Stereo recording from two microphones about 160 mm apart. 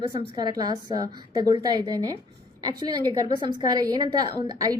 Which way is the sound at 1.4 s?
20° right (ahead or behind).